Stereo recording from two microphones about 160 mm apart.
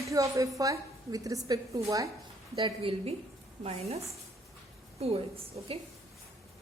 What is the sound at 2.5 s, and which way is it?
A woman's voice, 35° right (ahead or behind).